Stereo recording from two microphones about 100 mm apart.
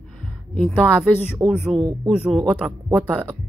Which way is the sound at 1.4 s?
5° right (ahead or behind).